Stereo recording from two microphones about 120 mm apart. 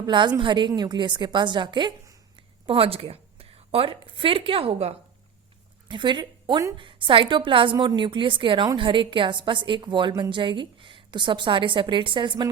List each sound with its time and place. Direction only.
0.0 s a woman's voice: 40° right (ahead or behind)
2.6 s a woman's voice: 50° right (ahead or behind)
5.9 s speech: 40° right (ahead or behind)
6.7 s a woman's voice: 45° right (ahead or behind)